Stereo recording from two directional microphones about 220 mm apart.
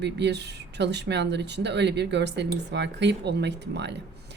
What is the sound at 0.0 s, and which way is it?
A woman's voice, 50° right (ahead or behind).